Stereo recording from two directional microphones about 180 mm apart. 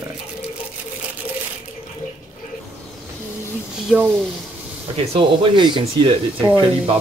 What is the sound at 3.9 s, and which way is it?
Speech, 5° right (ahead or behind).